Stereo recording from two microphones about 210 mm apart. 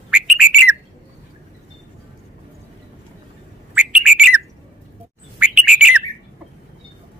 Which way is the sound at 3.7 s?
5° right (ahead or behind).